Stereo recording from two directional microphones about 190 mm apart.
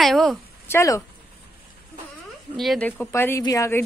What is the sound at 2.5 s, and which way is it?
Speech, centre (ahead or behind).